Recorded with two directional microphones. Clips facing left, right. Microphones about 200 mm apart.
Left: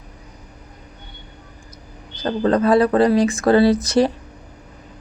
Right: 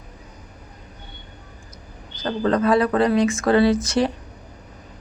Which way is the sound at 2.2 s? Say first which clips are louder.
Left 3 dB; 35° left (ahead or behind).